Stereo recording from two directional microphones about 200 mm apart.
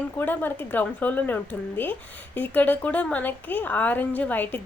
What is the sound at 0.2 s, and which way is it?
A woman's voice, 10° left (ahead or behind).